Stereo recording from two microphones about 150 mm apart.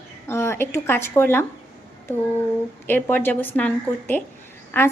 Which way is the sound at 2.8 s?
15° left (ahead or behind).